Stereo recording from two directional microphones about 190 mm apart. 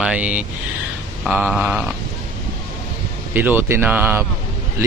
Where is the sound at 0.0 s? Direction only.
5° right (ahead or behind).